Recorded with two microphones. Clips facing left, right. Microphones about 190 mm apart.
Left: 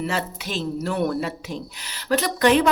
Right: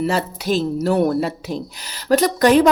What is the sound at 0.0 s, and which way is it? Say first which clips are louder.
Speech: right 6 dB; 35° right (ahead or behind).